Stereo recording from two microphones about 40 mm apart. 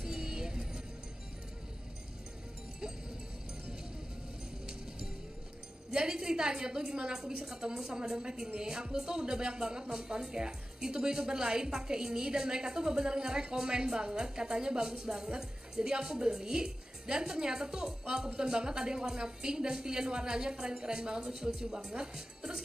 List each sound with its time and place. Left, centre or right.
0.0 s music: centre
5.9 s a woman's voice: centre